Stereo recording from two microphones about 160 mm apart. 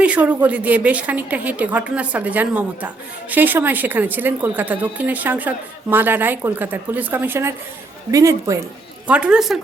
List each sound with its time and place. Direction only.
0.0 s a sound: 10° right (ahead or behind)
0.4 s a woman's voice: 10° right (ahead or behind)
9.0 s a woman's voice: 5° right (ahead or behind)